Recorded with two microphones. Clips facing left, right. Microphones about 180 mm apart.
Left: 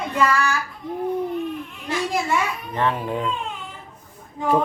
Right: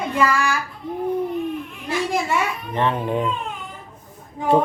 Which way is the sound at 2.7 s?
25° right (ahead or behind).